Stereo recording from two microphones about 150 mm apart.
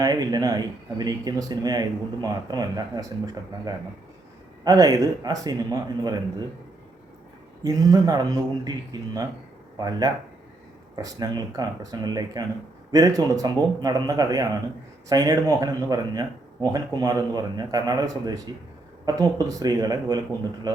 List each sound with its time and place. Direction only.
0.0 s speech: 25° right (ahead or behind)
7.6 s speech: 25° right (ahead or behind)